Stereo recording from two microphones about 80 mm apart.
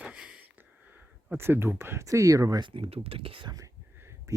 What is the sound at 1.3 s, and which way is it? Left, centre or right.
Speech, right.